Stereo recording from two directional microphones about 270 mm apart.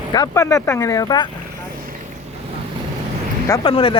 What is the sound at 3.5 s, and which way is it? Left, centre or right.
Speech, centre.